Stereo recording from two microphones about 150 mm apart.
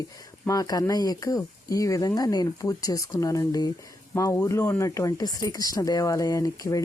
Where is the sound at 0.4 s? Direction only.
25° left (ahead or behind).